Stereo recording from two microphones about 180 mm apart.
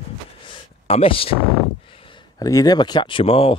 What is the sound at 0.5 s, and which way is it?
Speech, 30° left (ahead or behind).